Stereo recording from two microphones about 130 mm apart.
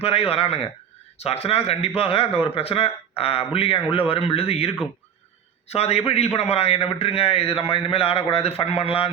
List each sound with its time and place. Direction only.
0.0 s a man's voice: 50° left (ahead or behind)